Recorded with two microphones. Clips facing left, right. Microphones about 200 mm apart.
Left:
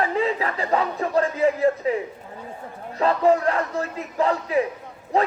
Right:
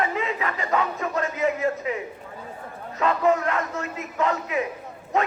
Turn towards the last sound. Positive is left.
turn(degrees=35)  # may be behind; listen again after turning